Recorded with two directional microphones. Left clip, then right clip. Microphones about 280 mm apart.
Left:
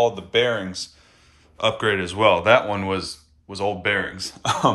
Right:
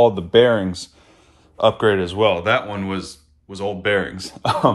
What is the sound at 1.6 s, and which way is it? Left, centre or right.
A man's voice, centre.